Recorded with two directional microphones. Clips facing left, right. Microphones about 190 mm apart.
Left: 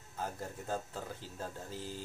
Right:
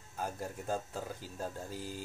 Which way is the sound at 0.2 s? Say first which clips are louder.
Right 2 dB; 10° right (ahead or behind).